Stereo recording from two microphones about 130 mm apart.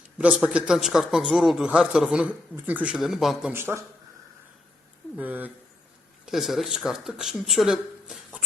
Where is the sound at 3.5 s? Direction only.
20° right (ahead or behind).